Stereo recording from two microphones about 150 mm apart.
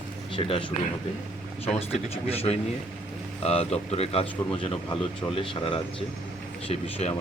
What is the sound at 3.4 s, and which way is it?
Speech, 45° left (ahead or behind).